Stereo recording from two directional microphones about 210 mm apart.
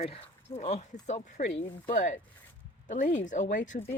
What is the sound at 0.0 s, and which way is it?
Speech, 30° left (ahead or behind).